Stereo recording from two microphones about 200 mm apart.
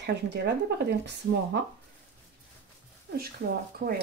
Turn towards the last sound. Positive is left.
turn(degrees=-50)  # may be behind; listen again after turning